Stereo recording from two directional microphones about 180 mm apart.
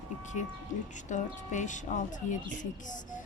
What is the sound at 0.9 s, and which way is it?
A woman's voice, 45° left (ahead or behind).